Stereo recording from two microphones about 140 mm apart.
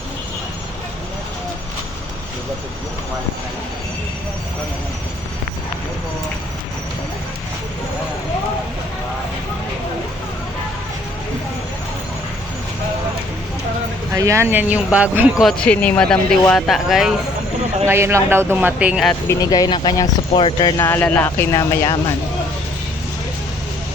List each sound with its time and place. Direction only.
14.1 s speech: 20° right (ahead or behind)
15.4 s speech: 5° left (ahead or behind)
17.8 s speech: 20° right (ahead or behind)
19.3 s speech: 25° left (ahead or behind)
20.8 s speech: 15° left (ahead or behind)